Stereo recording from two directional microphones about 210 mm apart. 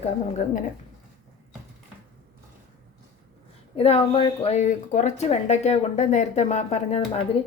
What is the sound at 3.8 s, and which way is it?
A woman's voice, 25° left (ahead or behind).